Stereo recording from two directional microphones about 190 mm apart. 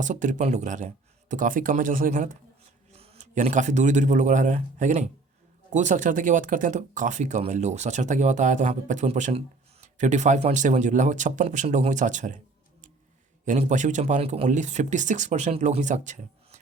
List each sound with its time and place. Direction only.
0.0 s speech: 40° right (ahead or behind)
2.9 s a man's voice: 35° right (ahead or behind)
13.4 s speech: 40° right (ahead or behind)